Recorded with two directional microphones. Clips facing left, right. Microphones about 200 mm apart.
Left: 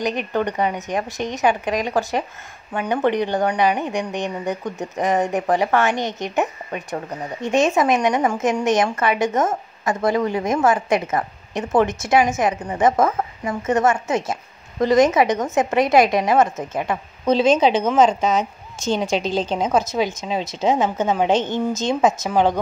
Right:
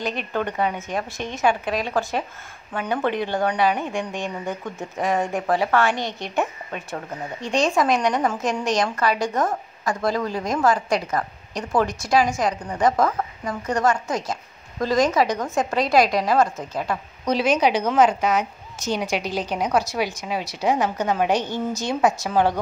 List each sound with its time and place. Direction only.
0.3 s a woman's voice: 15° left (ahead or behind)